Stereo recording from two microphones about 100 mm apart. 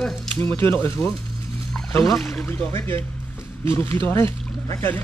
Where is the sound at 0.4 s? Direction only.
25° left (ahead or behind).